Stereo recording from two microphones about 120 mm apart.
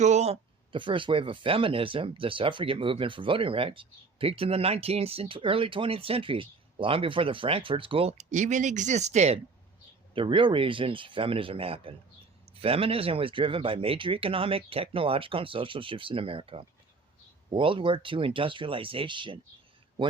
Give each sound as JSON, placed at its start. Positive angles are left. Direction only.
{"t": 0.0, "sound": "speech", "side_deg": -70}
{"t": 0.7, "sound": "speech", "side_deg": -45}
{"t": 8.2, "sound": "speech", "side_deg": -85}
{"t": 10.2, "sound": "speech", "side_deg": -45}